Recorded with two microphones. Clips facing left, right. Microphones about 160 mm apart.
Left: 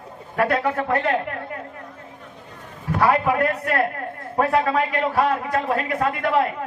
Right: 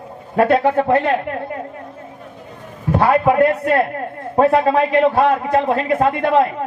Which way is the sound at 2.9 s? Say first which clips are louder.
Right 5 dB; 25° right (ahead or behind).